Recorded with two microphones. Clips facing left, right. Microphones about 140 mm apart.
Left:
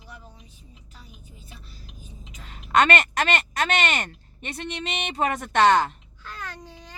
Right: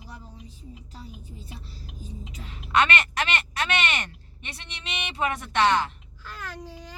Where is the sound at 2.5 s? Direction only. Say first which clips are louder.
Left 3 dB; 45° left (ahead or behind).